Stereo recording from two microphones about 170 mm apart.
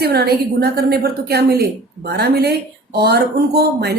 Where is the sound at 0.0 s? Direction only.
70° right (ahead or behind).